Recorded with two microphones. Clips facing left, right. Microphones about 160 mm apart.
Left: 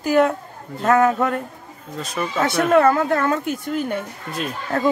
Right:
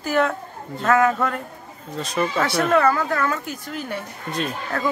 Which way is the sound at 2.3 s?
20° left (ahead or behind).